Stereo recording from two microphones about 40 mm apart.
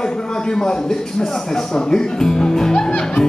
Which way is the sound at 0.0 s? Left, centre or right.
Centre.